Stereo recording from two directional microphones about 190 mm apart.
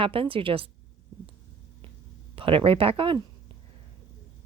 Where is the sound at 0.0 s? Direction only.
30° right (ahead or behind).